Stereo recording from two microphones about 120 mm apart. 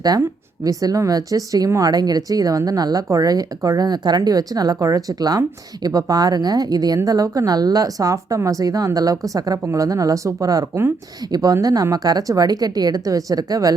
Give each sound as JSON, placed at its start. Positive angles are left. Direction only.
{"t": 0.1, "sound": "a woman's voice", "side_deg": -30}